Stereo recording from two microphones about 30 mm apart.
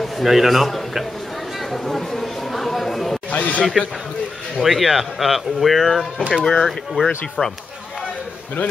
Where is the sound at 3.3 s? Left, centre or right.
Left.